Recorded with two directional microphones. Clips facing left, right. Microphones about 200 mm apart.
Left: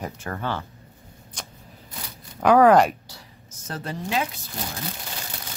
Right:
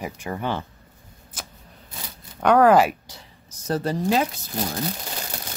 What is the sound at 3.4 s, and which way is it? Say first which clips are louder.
Speech: right 9 dB; 40° right (ahead or behind).